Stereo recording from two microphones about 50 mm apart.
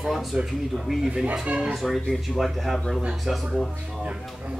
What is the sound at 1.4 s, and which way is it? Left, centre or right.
Speech, centre.